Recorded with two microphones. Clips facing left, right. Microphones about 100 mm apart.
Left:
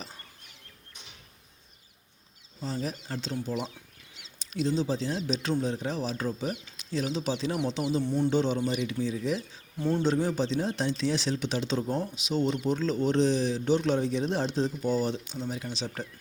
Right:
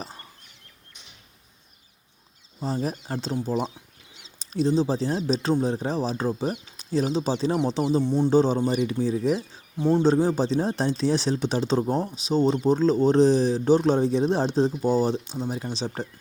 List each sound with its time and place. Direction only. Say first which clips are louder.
2.6 s speech: right 5 dB; 45° right (ahead or behind)
8.0 s speech: right 4 dB; 20° right (ahead or behind)
8.3 s speech: right 6 dB; 35° right (ahead or behind)
9.7 s speech: right 6 dB; 20° right (ahead or behind)
10.0 s speech: right 5 dB; 35° right (ahead or behind)